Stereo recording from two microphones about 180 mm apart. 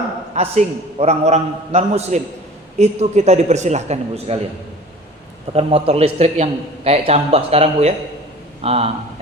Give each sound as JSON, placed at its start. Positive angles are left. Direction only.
{"t": 0.3, "sound": "a man's voice", "side_deg": -35}
{"t": 5.5, "sound": "a man's voice", "side_deg": -35}